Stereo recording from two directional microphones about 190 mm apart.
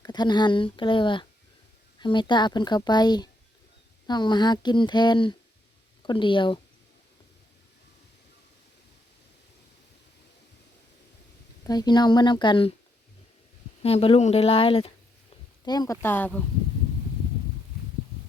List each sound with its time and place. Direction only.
0.0 s speech: 20° left (ahead or behind)
11.6 s speech: 20° left (ahead or behind)
13.8 s a woman's voice: 30° left (ahead or behind); by 16.4 s 10° left (ahead or behind)